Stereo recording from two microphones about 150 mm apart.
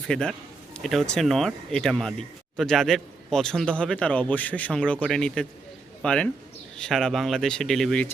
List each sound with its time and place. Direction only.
0.1 s speech: 5° left (ahead or behind)